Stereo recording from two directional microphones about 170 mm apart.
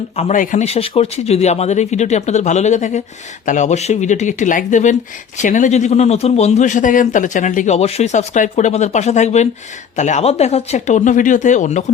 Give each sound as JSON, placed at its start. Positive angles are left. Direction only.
{"t": 0.2, "sound": "a man's voice", "side_deg": 45}